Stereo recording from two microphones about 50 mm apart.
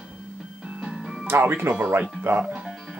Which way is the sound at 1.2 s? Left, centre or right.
Right.